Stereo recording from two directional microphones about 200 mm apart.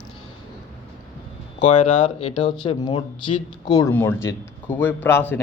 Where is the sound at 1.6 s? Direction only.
30° left (ahead or behind).